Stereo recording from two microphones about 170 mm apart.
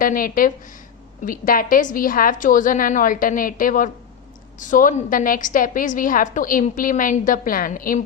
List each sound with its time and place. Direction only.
0.0 s a woman's voice: 55° left (ahead or behind)